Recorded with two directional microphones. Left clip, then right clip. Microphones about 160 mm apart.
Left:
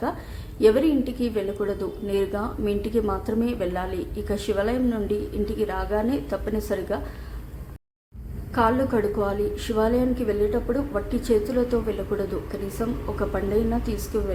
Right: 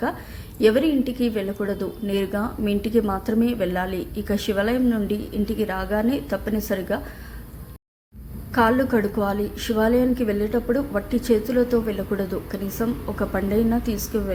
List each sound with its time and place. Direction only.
0.6 s a woman's voice: 15° right (ahead or behind)
8.5 s a woman's voice: 20° right (ahead or behind)